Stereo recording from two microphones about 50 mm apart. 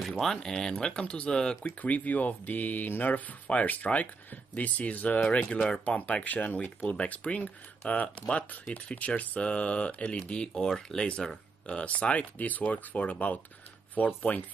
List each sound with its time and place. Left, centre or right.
0.2 s speech: centre
1.8 s speech: left
5.2 s speech: centre
5.9 s speech: left